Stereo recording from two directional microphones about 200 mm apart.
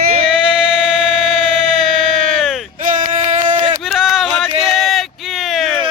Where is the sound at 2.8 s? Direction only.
40° right (ahead or behind).